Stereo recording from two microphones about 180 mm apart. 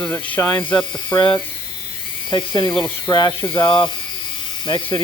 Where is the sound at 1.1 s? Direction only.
25° left (ahead or behind).